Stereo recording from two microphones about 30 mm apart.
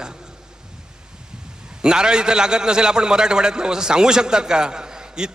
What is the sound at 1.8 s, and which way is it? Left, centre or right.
A man's voice, right.